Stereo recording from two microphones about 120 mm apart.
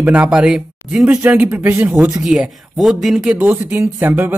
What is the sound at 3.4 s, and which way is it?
Speech, 20° right (ahead or behind).